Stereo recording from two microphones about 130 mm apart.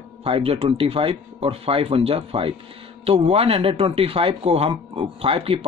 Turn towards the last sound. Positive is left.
turn(degrees=-45)  # may be behind; listen again after turning